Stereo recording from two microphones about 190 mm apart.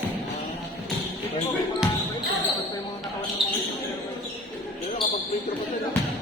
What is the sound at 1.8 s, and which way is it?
Basketball bounce, 5° right (ahead or behind).